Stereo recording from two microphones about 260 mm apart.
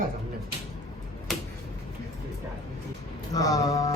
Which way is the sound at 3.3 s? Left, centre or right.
Centre.